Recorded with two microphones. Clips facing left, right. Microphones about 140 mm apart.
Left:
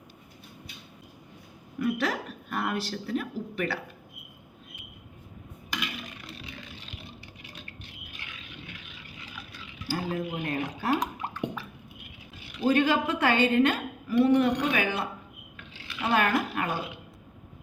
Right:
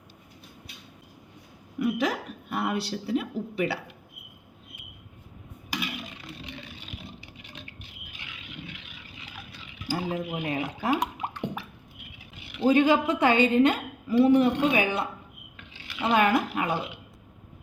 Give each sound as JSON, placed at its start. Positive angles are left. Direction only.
{"t": 1.8, "sound": "a woman's voice", "side_deg": -15}
{"t": 9.8, "sound": "dishes", "side_deg": -15}
{"t": 11.2, "sound": "a sound", "side_deg": -15}
{"t": 12.6, "sound": "a woman's voice", "side_deg": -15}
{"t": 15.7, "sound": "squish", "side_deg": -20}